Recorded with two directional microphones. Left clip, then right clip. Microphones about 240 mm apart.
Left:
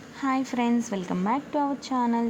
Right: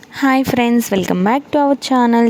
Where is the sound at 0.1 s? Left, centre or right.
Right.